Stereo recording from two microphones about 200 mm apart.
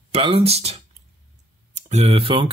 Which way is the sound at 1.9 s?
35° right (ahead or behind).